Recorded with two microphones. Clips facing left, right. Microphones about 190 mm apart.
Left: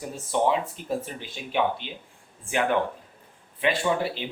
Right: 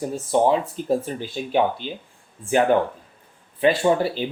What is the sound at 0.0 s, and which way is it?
A man's voice, 35° right (ahead or behind).